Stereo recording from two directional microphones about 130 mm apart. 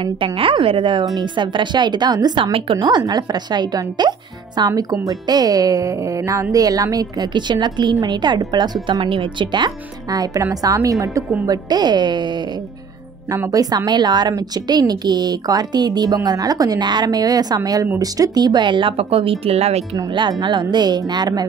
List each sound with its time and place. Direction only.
0.0 s a woman's voice: 40° right (ahead or behind)
13.3 s a woman's voice: 25° right (ahead or behind); by 19.8 s 55° right (ahead or behind)
20.2 s a woman's voice: 35° right (ahead or behind)